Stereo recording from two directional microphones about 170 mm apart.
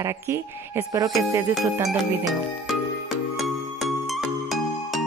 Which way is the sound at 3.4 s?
Centre (ahead or behind).